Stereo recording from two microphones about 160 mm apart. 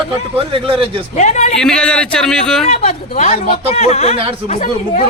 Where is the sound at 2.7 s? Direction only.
45° left (ahead or behind).